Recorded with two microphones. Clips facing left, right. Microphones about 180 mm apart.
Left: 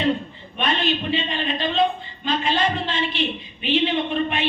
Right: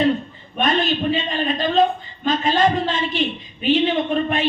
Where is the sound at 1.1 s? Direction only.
45° right (ahead or behind).